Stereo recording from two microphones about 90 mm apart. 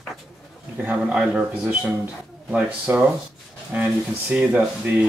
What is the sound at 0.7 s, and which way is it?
Speech, 15° right (ahead or behind).